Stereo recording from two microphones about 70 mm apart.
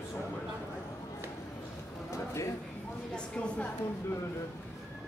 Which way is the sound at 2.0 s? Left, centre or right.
Left.